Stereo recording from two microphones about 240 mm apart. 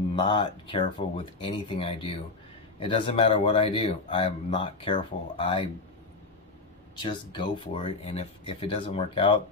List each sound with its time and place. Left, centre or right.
0.1 s speech: centre
7.0 s speech: centre